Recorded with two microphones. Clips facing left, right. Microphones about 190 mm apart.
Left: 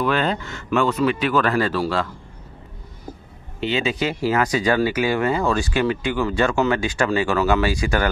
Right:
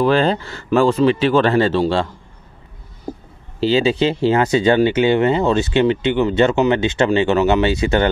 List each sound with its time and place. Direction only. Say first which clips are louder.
0.0 s speech: right 6 dB; 30° right (ahead or behind)
3.6 s speech: right 7 dB; 30° right (ahead or behind)